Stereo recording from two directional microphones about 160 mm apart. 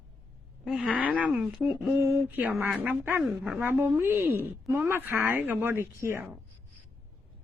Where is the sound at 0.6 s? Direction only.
5° right (ahead or behind).